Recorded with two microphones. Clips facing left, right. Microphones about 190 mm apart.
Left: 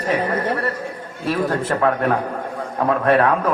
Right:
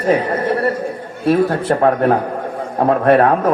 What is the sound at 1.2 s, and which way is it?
Speech, 50° right (ahead or behind).